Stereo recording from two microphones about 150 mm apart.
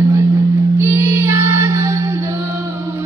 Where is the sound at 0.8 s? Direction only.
15° right (ahead or behind).